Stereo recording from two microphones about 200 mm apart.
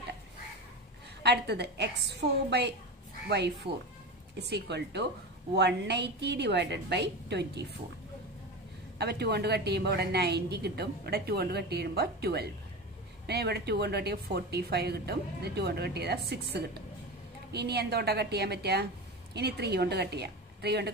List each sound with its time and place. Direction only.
1.2 s a woman's voice: 55° right (ahead or behind)
8.9 s a woman's voice: 55° right (ahead or behind)
17.5 s a woman's voice: 55° right (ahead or behind)